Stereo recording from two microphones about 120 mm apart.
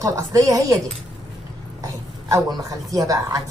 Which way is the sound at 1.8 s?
30° right (ahead or behind).